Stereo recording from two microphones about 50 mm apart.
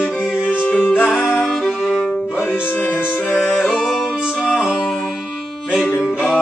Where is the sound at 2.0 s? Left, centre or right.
Left.